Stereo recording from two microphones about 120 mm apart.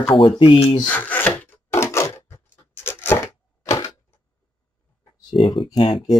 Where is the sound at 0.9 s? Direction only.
15° left (ahead or behind).